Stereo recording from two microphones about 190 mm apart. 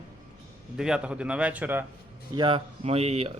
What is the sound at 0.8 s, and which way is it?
Speech, 5° right (ahead or behind).